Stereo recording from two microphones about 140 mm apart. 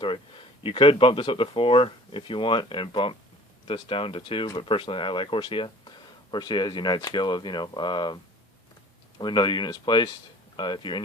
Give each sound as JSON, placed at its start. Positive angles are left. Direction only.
{"t": 0.0, "sound": "speech", "side_deg": 40}